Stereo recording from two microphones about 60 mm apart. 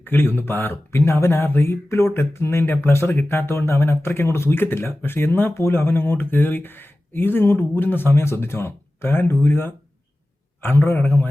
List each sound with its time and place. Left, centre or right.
0.0 s speech: left